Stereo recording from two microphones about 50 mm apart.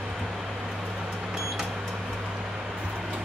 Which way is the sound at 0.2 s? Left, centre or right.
Centre.